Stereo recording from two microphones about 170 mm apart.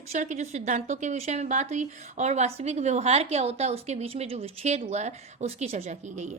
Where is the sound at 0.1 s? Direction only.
45° right (ahead or behind).